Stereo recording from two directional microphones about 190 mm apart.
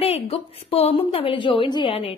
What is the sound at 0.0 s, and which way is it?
A woman's voice, 30° left (ahead or behind).